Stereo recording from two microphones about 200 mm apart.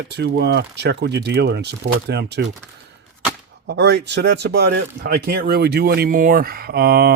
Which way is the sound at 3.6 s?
60° right (ahead or behind).